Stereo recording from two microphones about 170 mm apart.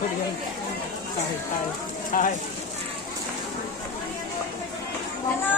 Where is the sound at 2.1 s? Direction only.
55° left (ahead or behind).